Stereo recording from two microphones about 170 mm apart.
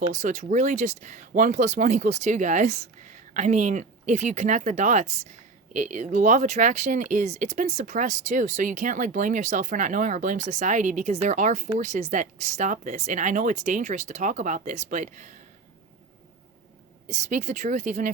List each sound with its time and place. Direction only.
0.0 s speech: 45° right (ahead or behind)
17.1 s speech: 45° right (ahead or behind)